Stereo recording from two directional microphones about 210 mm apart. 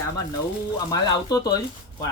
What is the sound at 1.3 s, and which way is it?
Speech, 20° left (ahead or behind).